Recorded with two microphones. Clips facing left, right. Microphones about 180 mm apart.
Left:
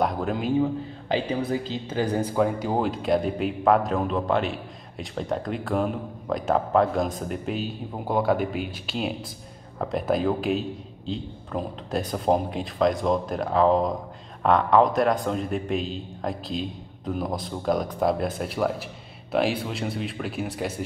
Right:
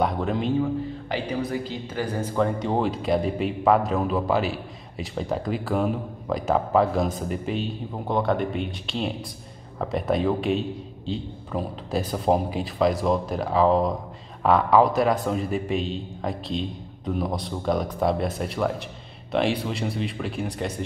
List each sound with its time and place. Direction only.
0.0 s a sound: centre (ahead or behind)
1.0 s a woman's voice: 25° left (ahead or behind)
2.3 s speech: 5° left (ahead or behind)